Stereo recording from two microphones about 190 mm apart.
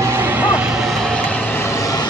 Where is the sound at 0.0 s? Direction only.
15° right (ahead or behind).